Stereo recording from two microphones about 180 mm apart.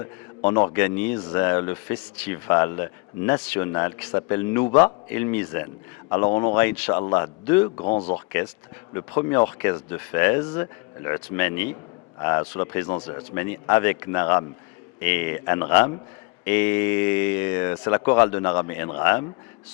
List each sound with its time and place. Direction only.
0.8 s speech: 10° left (ahead or behind)
6.2 s a man's voice: 30° left (ahead or behind)
6.5 s a man's voice: 10° left (ahead or behind)
7.8 s speech: 30° left (ahead or behind)
9.0 s speech: 20° left (ahead or behind)